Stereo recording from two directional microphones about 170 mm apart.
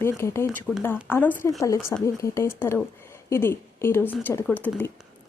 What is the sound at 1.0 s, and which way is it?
A woman's voice, 10° left (ahead or behind).